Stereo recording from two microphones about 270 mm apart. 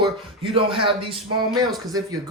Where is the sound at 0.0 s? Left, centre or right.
Centre.